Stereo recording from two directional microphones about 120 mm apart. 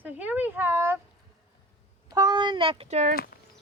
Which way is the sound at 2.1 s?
35° right (ahead or behind).